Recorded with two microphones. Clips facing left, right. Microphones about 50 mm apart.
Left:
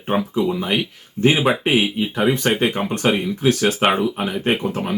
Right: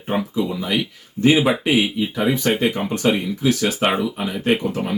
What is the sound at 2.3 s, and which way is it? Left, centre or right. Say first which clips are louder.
Speech: even; left.